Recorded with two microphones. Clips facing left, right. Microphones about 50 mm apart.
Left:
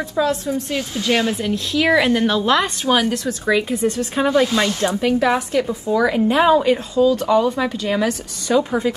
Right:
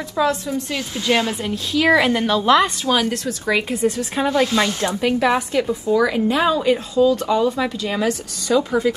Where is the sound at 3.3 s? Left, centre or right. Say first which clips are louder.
Left 2 dB; left.